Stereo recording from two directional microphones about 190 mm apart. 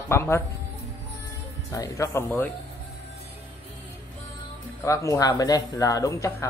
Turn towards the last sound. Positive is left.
turn(degrees=15)  # may be behind; listen again after turning